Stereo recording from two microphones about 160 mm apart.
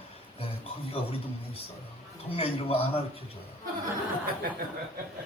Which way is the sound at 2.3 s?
35° left (ahead or behind).